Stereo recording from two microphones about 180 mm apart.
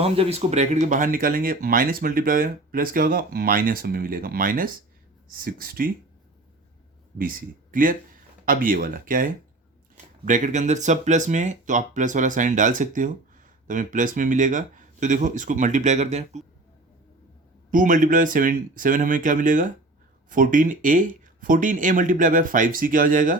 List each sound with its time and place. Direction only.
0.0 s speech: 35° right (ahead or behind); by 5.9 s 55° right (ahead or behind)
7.2 s speech: 50° right (ahead or behind)
17.7 s speech: 45° right (ahead or behind)